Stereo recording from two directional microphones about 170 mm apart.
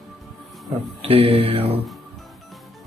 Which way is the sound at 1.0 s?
35° right (ahead or behind).